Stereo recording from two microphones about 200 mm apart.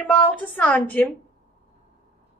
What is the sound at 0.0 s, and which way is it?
A woman's voice, 5° left (ahead or behind).